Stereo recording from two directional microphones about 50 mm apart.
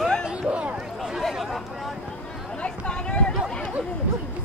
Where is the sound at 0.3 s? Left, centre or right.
Right.